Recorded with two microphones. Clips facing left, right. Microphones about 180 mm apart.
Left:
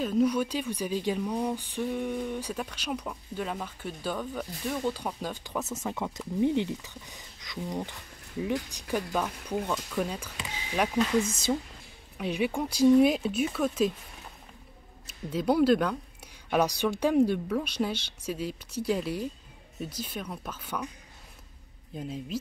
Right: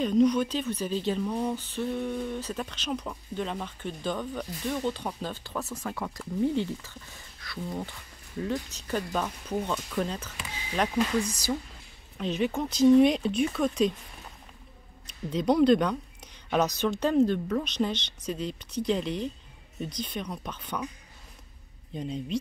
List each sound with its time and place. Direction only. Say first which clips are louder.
0.0 s speech: right 3 dB; 5° left (ahead or behind)
11.1 s speech: left 2 dB; 25° left (ahead or behind)
12.2 s speech: right 1 dB; 10° left (ahead or behind)
15.0 s speech: right 1 dB; 5° left (ahead or behind)
21.9 s speech: right 3 dB; 5° left (ahead or behind)